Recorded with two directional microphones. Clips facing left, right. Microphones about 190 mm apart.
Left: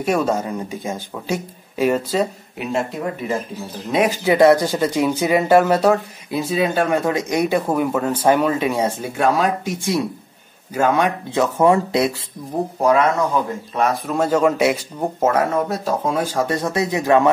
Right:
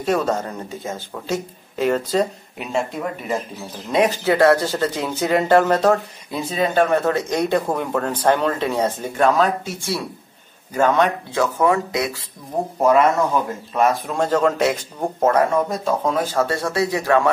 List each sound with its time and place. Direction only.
0.0 s speech: 10° left (ahead or behind)
11.3 s speech: 30° left (ahead or behind)
12.8 s speech: centre (ahead or behind); by 17.3 s 20° left (ahead or behind)